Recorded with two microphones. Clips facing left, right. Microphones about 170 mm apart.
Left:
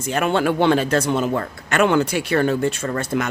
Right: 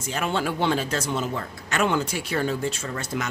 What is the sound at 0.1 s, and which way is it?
A man's voice, 60° left (ahead or behind).